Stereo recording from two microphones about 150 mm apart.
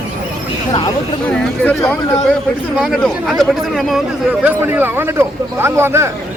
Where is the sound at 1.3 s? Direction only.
5° left (ahead or behind).